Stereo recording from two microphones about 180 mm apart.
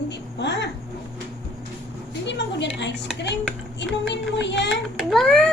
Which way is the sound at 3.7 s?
80° left.